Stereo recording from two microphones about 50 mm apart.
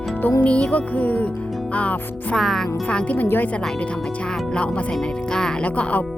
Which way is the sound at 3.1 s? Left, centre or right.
Left.